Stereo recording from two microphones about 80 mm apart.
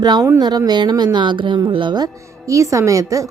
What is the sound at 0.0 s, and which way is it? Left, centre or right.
Speech, right.